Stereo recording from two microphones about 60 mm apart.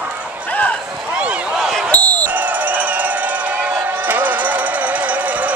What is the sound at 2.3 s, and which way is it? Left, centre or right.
Crowd, right.